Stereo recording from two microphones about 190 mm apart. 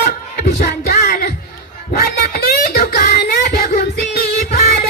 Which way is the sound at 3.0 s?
55° left (ahead or behind).